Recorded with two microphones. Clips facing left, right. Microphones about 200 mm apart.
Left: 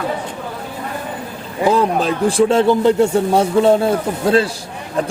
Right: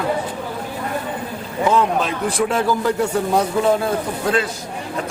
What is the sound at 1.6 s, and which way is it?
A man's voice, 35° left (ahead or behind).